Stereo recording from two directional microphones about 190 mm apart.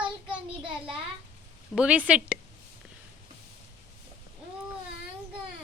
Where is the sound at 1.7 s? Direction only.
5° right (ahead or behind).